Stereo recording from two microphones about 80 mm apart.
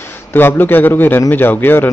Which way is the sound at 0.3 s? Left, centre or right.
Left.